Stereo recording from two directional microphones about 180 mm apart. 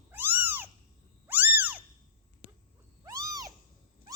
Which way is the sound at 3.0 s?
20° right (ahead or behind).